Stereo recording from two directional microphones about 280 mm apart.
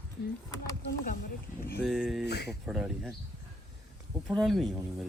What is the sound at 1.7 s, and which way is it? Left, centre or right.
Speech, centre.